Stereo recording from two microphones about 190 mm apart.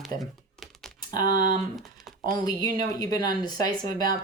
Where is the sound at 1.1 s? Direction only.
45° right (ahead or behind).